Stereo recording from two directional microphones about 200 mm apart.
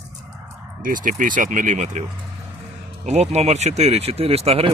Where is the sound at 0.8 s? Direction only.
40° right (ahead or behind).